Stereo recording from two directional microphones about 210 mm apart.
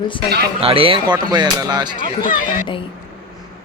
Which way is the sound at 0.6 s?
25° right (ahead or behind).